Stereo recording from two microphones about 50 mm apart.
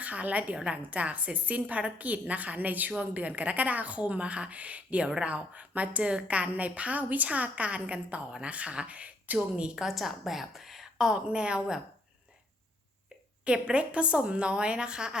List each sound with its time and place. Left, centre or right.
0.0 s a woman's voice: right
9.6 s a woman's voice: right
9.8 s a woman's voice: centre
11.1 s a woman's voice: centre
13.4 s a woman's voice: right